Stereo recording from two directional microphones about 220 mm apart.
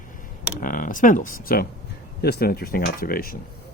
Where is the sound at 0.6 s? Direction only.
40° left (ahead or behind).